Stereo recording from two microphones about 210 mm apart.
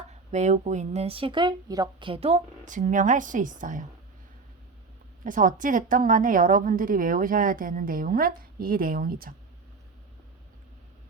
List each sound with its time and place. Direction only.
0.1 s a woman's voice: 35° right (ahead or behind)
5.2 s a woman's voice: 40° right (ahead or behind)